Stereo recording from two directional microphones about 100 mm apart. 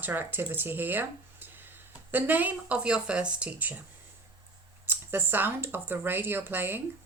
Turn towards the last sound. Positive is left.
turn(degrees=-20)  # may be behind; listen again after turning